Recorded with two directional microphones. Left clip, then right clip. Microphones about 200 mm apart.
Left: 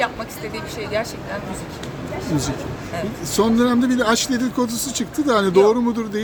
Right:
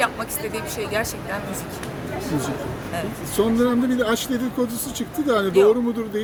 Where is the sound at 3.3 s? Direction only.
45° left (ahead or behind).